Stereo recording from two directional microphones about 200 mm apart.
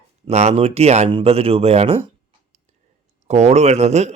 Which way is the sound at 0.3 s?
35° right (ahead or behind).